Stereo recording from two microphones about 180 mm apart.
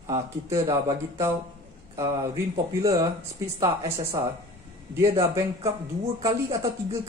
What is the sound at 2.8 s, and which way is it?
Speech, 20° right (ahead or behind).